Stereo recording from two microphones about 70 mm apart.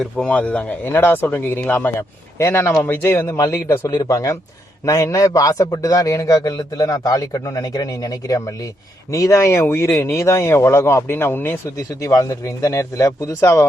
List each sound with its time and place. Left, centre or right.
0.3 s speech: centre
2.0 s speech: left
3.8 s a man's voice: left
9.1 s speech: left
11.8 s a man's voice: left